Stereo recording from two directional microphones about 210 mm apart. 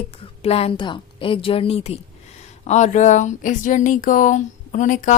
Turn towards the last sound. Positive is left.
turn(degrees=35)  # may be behind; listen again after turning